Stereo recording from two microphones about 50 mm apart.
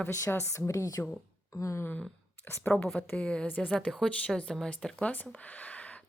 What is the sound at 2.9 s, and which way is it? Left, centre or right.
Speech, left.